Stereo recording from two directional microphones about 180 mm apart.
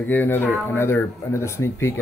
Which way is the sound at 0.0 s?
10° left (ahead or behind).